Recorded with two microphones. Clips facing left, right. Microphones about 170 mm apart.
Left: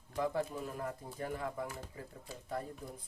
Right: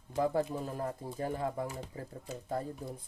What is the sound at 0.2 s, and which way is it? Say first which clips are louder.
Speech: right 4 dB; 35° right (ahead or behind).